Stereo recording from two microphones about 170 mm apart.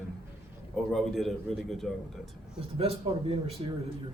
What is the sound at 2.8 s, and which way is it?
Speech, 35° right (ahead or behind).